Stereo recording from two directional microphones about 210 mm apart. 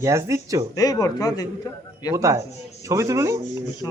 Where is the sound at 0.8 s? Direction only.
15° left (ahead or behind).